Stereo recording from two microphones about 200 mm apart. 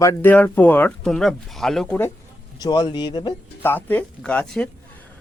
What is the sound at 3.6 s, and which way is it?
Speech, 10° left (ahead or behind).